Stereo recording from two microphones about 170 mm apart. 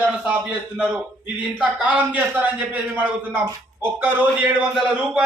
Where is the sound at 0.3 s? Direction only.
10° right (ahead or behind).